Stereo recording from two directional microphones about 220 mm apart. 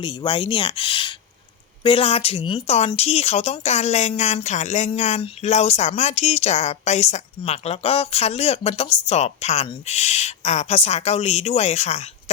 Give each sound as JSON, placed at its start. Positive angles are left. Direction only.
{"t": 0.0, "sound": "speech", "side_deg": 20}